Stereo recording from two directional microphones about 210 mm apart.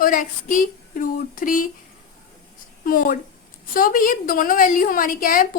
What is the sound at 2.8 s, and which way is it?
A woman's voice, 40° left (ahead or behind).